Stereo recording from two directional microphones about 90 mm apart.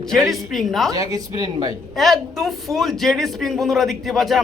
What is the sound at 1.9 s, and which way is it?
Speech, centre (ahead or behind).